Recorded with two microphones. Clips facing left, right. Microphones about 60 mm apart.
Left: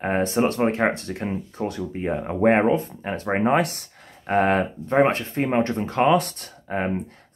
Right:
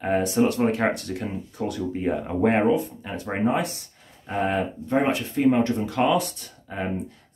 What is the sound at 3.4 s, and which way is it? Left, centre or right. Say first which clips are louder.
Speech: left 3 dB; left.